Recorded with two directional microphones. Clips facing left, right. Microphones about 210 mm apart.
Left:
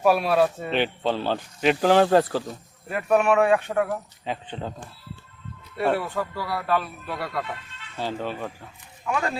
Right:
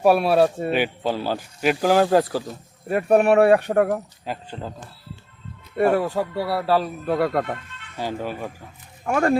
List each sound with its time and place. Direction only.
0.3 s speech: 30° right (ahead or behind)
0.7 s speech: 10° right (ahead or behind)
2.9 s speech: 45° right (ahead or behind)
4.3 s speech: 5° right (ahead or behind)
5.8 s speech: 55° right (ahead or behind)
6.1 s speech: 25° right (ahead or behind)
7.0 s speech: 50° right (ahead or behind)
7.9 s speech: 10° right (ahead or behind)
9.0 s speech: 50° right (ahead or behind)